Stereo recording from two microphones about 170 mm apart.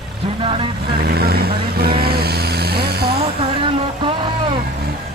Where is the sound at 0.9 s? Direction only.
65° right (ahead or behind).